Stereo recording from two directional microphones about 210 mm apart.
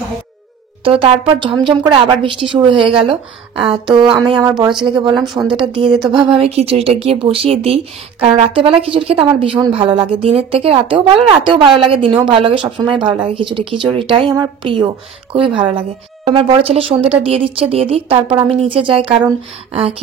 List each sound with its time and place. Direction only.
0.8 s a woman's voice: 25° right (ahead or behind)
5.1 s speech: centre (ahead or behind)
6.3 s a woman's voice: 30° right (ahead or behind)
12.7 s speech: 5° right (ahead or behind)
13.3 s a woman's voice: 25° right (ahead or behind)